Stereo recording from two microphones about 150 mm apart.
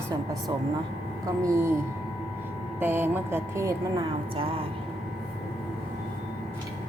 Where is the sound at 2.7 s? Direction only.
15° right (ahead or behind).